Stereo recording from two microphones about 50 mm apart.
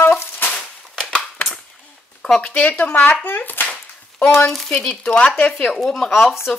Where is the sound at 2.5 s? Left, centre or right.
Left.